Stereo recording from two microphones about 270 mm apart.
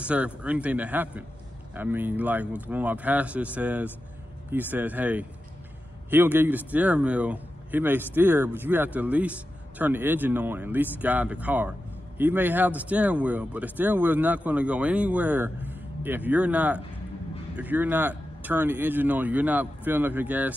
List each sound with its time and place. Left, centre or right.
0.0 s speech: centre